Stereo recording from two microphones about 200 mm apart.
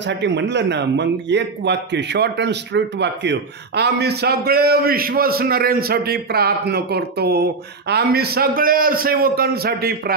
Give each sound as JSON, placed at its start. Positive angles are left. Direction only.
{"t": 0.2, "sound": "a man's voice", "side_deg": -60}